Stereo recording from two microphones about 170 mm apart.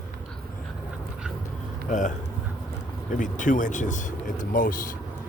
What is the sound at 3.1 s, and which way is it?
Speech, 50° left (ahead or behind).